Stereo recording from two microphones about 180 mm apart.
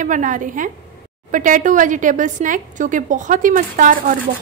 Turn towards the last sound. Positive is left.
turn(degrees=-50)  # may be behind; listen again after turning